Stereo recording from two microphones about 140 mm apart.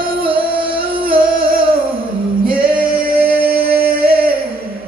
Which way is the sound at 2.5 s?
90° right.